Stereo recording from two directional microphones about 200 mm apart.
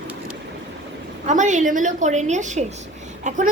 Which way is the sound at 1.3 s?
35° right (ahead or behind).